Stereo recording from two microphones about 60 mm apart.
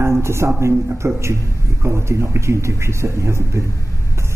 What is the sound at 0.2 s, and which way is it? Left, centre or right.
A man's voice, right.